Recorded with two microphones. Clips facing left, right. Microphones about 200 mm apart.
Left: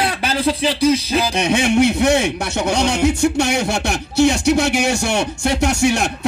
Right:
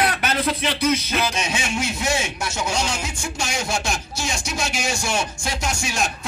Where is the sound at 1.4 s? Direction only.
60° left (ahead or behind).